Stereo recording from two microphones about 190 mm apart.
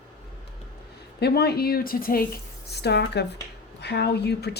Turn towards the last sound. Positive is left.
turn(degrees=60)  # may be behind; listen again after turning